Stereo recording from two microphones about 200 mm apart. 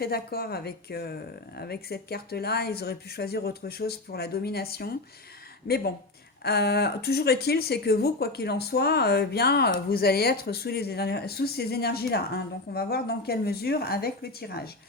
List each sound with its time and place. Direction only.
0.0 s speech: 50° left (ahead or behind)